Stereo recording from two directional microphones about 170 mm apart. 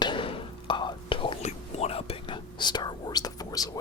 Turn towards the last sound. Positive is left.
turn(degrees=20)  # may be behind; listen again after turning